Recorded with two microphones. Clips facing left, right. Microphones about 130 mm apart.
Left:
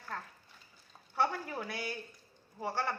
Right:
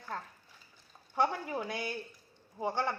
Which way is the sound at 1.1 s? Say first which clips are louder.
Right 2 dB; 15° right (ahead or behind).